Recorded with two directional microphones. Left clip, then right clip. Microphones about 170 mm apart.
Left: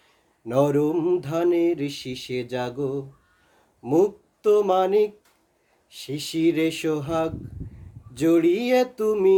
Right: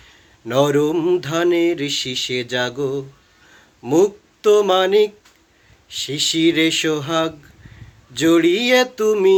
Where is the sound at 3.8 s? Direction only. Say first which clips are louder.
Right 5 dB; 10° left (ahead or behind).